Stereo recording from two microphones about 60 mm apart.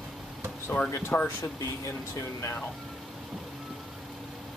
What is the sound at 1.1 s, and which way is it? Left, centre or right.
Speech, left.